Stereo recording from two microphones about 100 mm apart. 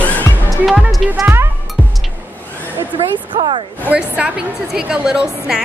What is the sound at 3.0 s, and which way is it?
Speech, 65° right (ahead or behind).